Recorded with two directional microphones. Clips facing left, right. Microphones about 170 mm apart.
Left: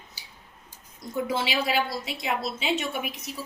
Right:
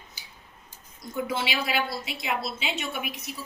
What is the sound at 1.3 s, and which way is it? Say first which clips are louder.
A woman's voice: left 3 dB; 35° left (ahead or behind).